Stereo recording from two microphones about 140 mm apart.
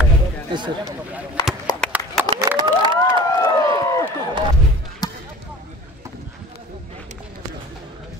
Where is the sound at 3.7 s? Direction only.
25° left (ahead or behind).